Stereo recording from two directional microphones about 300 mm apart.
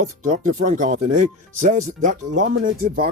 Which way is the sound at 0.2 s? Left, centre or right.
Right.